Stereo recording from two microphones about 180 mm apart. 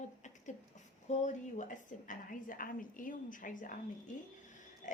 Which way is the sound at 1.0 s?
40° left (ahead or behind).